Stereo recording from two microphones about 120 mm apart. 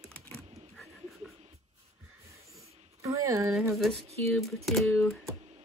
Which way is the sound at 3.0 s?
25° right (ahead or behind).